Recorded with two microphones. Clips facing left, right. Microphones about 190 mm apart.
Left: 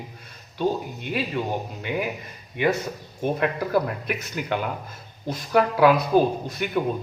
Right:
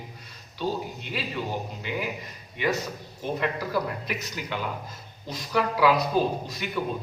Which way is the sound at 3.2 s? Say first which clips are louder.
Left 4 dB; 55° left (ahead or behind).